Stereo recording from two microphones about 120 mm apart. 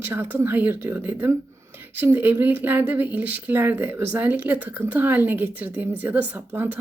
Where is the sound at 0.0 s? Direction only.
20° right (ahead or behind).